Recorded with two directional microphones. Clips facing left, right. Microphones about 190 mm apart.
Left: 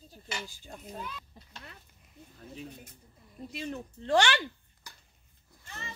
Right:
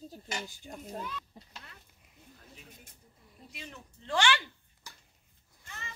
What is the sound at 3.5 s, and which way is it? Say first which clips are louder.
Speech: left 11 dB; 40° left (ahead or behind).